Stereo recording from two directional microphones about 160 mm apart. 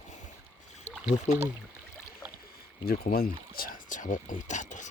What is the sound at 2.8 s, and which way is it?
Speech, 70° left (ahead or behind).